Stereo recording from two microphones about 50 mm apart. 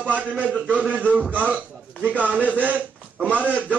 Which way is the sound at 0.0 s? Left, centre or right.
Right.